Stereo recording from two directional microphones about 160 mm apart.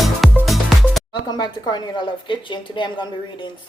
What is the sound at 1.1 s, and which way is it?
A woman's voice, 25° left (ahead or behind).